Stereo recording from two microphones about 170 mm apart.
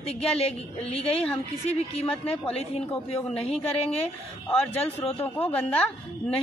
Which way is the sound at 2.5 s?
35° left (ahead or behind).